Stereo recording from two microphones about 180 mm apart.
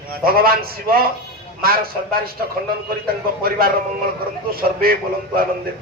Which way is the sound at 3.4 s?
55° right (ahead or behind).